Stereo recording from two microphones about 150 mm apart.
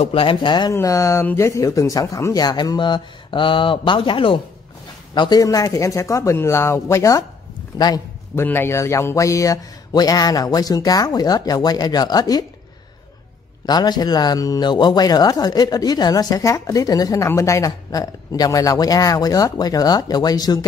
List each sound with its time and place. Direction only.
0.0 s speech: 40° left (ahead or behind)
0.7 s a man's voice: 20° left (ahead or behind)
13.7 s speech: 30° left (ahead or behind)